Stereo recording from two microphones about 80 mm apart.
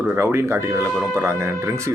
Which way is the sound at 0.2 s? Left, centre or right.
Right.